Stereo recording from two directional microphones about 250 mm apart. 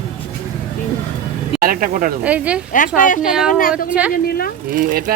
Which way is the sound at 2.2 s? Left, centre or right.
Centre.